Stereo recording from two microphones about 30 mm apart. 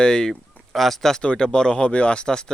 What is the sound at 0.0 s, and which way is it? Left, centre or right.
Speech, left.